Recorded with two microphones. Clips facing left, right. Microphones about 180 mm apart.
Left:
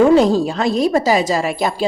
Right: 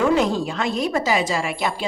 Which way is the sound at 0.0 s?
35° left (ahead or behind).